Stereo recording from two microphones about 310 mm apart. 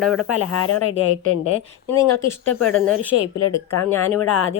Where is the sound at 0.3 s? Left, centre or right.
Left.